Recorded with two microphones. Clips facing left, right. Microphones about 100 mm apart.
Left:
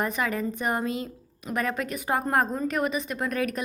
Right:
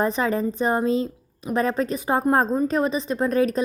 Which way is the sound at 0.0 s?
30° right (ahead or behind).